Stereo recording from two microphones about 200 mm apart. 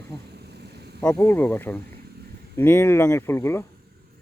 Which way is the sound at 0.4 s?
55° right (ahead or behind).